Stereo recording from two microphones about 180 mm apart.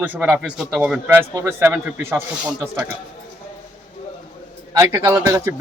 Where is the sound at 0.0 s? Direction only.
10° right (ahead or behind).